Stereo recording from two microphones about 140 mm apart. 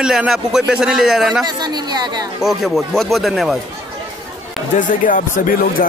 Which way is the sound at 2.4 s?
Centre (ahead or behind).